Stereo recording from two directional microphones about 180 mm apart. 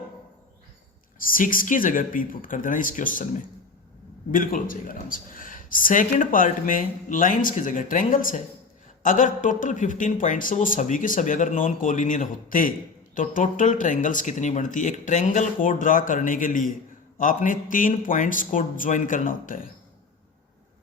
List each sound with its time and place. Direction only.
1.2 s speech: 50° left (ahead or behind)
4.3 s speech: 50° left (ahead or behind)